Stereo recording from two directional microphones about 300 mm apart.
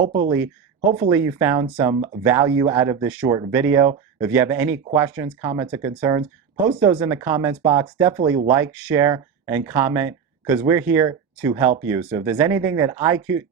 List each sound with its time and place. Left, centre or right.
0.0 s speech: right